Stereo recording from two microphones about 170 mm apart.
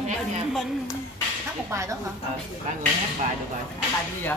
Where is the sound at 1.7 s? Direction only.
15° right (ahead or behind).